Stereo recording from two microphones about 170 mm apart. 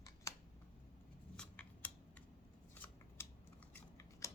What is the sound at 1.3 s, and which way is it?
Scissors, 10° left (ahead or behind).